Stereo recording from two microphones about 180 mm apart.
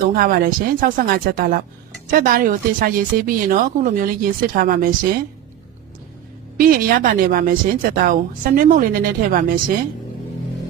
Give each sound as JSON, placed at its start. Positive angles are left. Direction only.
{"t": 0.1, "sound": "a woman's voice", "side_deg": -55}
{"t": 6.6, "sound": "a woman's voice", "side_deg": -55}